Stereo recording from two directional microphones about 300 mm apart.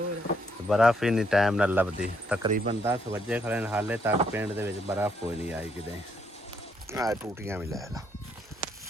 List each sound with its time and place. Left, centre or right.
0.7 s speech: centre
2.4 s speech: right
2.8 s speech: centre
6.9 s speech: centre
8.6 s a sound: left